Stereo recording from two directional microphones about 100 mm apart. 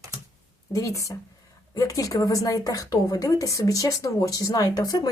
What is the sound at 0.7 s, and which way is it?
A woman's voice, 30° left (ahead or behind).